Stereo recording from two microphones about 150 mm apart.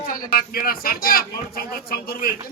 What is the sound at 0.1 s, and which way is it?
A man's voice, 75° left (ahead or behind).